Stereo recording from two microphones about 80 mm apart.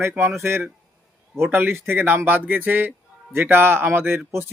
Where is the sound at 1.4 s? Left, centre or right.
Right.